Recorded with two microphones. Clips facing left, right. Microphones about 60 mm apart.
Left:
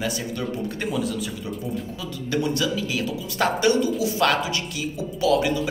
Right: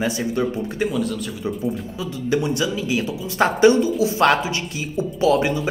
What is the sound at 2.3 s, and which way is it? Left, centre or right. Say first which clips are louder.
Speech: right 2 dB; right.